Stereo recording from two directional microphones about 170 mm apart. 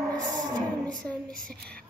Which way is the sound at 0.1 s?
25° right (ahead or behind).